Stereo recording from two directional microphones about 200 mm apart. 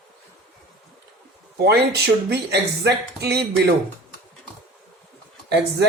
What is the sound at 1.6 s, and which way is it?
A man's voice, 55° right (ahead or behind).